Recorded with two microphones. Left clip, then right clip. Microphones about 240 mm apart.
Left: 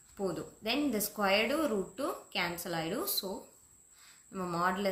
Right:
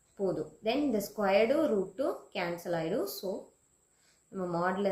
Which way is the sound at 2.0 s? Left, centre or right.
Left.